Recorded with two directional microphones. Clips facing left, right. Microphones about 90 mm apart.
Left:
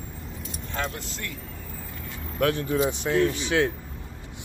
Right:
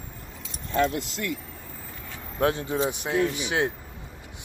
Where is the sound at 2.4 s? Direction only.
20° right (ahead or behind).